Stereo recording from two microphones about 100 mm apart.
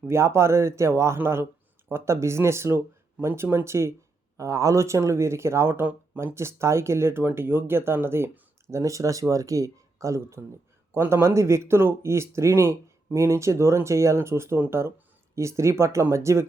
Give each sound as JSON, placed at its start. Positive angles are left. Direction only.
{"t": 0.0, "sound": "speech", "side_deg": -25}